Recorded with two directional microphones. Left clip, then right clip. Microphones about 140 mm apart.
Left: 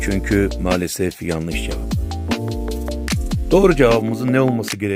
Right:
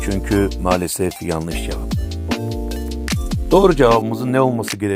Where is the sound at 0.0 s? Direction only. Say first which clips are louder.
Even; 15° left (ahead or behind).